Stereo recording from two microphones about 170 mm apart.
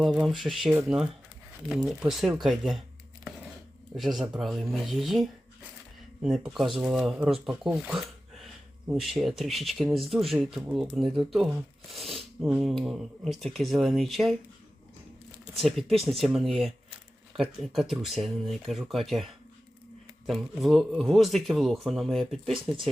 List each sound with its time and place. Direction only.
0.0 s a man's voice: centre (ahead or behind)
3.9 s a man's voice: centre (ahead or behind)
15.6 s a man's voice: centre (ahead or behind)